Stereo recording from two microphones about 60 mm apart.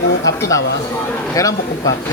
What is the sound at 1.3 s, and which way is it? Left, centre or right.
Speech, left.